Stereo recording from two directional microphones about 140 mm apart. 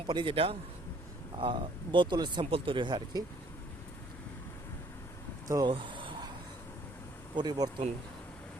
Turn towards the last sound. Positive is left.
turn(degrees=-30)  # may be behind; listen again after turning